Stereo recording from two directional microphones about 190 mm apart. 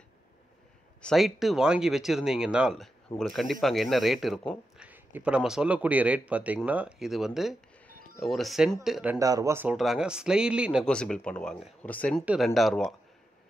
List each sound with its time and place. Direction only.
1.0 s speech: centre (ahead or behind)
9.2 s speech: 15° right (ahead or behind); by 12.9 s centre (ahead or behind)